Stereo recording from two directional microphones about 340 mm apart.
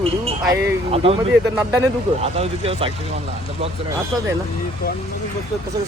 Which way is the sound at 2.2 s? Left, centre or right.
Centre.